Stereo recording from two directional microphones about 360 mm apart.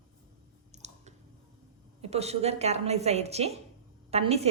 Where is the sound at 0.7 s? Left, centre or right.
Centre.